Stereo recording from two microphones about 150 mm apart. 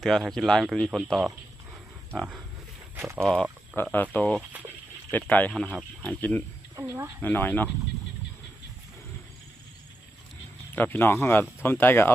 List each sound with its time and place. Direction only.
0.0 s speech: centre (ahead or behind)
2.9 s a sound: 15° right (ahead or behind)
3.2 s speech: 5° left (ahead or behind)
6.7 s speech: 15° right (ahead or behind)
7.2 s speech: 10° left (ahead or behind)
10.8 s speech: 15° left (ahead or behind)